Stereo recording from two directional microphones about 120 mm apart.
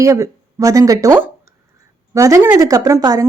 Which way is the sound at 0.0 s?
30° right (ahead or behind).